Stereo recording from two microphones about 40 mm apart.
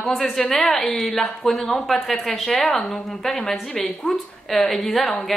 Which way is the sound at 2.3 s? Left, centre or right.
Centre.